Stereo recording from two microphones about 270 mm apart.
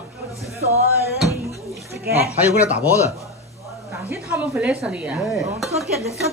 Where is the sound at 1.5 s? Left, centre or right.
Centre.